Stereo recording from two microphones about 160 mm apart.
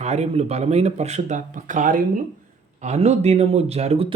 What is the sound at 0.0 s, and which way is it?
Speech, 40° right (ahead or behind).